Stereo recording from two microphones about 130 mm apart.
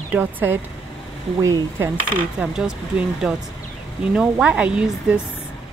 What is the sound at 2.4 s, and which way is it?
A woman's voice, 5° right (ahead or behind).